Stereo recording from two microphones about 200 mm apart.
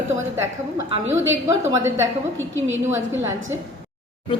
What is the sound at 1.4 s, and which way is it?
Speech, 15° right (ahead or behind).